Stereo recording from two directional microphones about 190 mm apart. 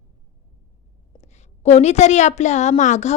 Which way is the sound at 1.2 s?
35° left (ahead or behind).